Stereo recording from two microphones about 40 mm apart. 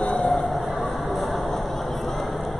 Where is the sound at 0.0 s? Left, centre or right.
Left.